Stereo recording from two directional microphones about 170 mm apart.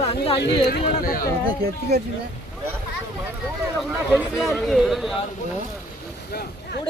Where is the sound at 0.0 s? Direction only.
35° left (ahead or behind).